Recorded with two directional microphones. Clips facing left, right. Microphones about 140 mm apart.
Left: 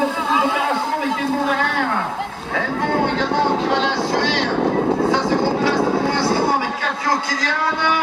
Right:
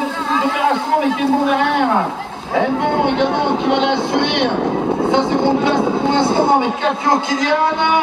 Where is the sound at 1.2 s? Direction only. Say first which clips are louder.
Right 5 dB; 20° right (ahead or behind).